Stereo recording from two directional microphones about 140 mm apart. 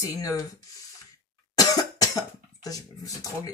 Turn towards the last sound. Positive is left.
turn(degrees=25)  # may be behind; listen again after turning